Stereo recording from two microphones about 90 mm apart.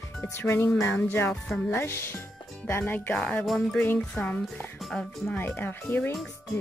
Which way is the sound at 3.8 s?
15° left (ahead or behind).